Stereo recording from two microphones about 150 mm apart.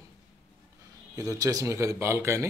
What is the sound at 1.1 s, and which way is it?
Speech, 25° right (ahead or behind).